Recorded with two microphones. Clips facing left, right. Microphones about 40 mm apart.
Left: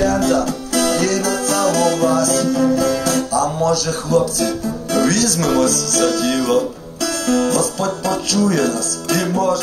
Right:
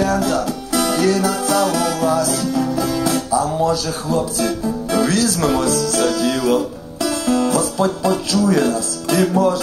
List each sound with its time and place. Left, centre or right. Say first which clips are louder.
0.0 s music: left 2 dB; centre
3.0 s music: even; right